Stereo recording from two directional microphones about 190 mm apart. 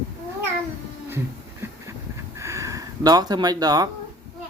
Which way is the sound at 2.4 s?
15° right (ahead or behind).